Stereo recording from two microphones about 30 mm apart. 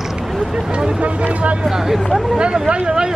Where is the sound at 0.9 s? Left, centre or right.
Right.